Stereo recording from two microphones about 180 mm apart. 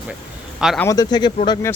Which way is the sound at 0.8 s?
20° left (ahead or behind).